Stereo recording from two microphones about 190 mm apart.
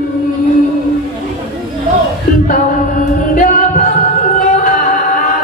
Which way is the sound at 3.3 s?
40° left (ahead or behind).